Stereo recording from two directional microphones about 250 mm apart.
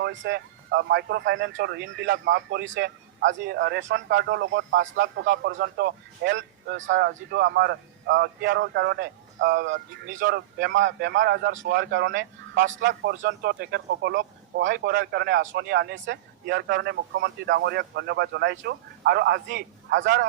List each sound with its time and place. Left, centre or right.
0.0 s a man's voice: right